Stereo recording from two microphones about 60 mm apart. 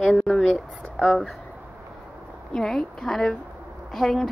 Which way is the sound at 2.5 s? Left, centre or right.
Centre.